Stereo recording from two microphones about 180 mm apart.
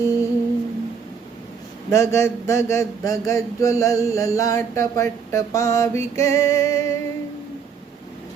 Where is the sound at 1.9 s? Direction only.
15° left (ahead or behind).